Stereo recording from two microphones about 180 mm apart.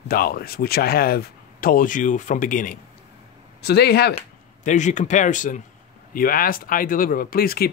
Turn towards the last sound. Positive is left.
turn(degrees=55)  # may be behind; listen again after turning